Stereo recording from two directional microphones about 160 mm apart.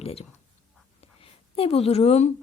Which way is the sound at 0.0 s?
40° left (ahead or behind).